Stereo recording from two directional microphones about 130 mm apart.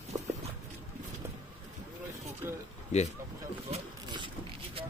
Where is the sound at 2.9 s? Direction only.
60° left (ahead or behind).